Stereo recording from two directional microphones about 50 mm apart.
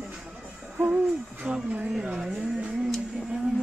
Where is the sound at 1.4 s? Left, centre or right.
Centre.